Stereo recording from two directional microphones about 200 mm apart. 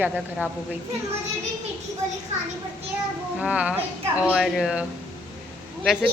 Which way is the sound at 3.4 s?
5° right (ahead or behind).